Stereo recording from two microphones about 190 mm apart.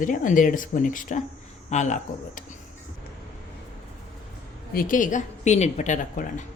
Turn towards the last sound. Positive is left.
turn(degrees=40)  # may be behind; listen again after turning